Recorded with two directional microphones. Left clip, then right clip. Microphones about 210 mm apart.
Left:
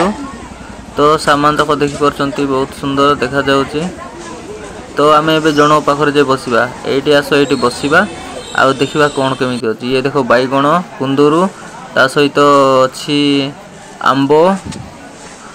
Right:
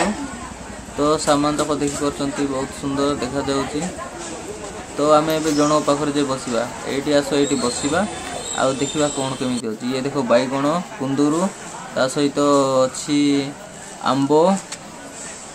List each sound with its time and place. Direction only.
0.9 s a man's voice: 30° left (ahead or behind)
4.9 s a man's voice: 30° left (ahead or behind)